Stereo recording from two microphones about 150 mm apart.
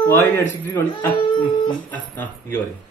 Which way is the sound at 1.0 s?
30° left (ahead or behind).